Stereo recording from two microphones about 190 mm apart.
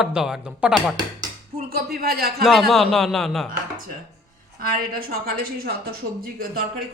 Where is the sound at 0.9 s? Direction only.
20° right (ahead or behind).